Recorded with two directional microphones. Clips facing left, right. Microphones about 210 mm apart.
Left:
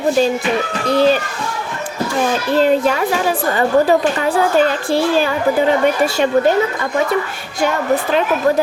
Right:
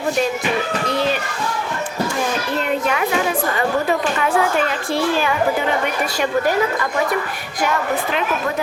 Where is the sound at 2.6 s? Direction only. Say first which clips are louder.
Left 8 dB; 35° left (ahead or behind).